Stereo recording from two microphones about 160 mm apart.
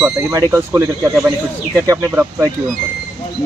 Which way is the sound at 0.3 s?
20° right (ahead or behind).